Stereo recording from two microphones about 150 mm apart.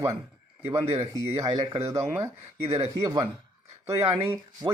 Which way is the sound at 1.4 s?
25° right (ahead or behind).